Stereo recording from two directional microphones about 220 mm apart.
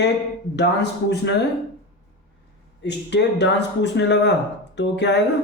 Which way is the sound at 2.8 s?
50° left (ahead or behind).